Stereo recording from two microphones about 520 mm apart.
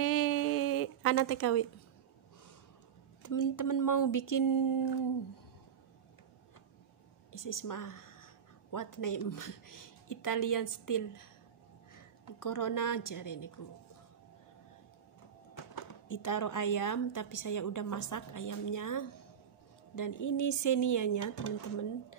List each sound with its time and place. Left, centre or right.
0.0 s a sound: left
3.2 s speech: left
7.3 s a woman's voice: left
15.5 s speech: left